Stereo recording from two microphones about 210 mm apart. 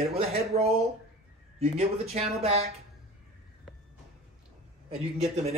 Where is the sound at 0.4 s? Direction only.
30° right (ahead or behind).